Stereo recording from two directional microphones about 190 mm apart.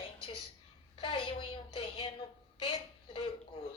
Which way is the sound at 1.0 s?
25° left (ahead or behind).